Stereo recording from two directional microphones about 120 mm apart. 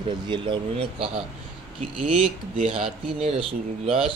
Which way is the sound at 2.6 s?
55° right (ahead or behind).